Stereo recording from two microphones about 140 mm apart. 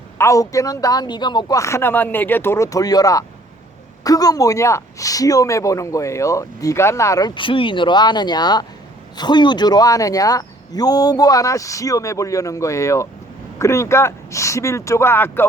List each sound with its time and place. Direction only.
0.2 s speech: 20° left (ahead or behind)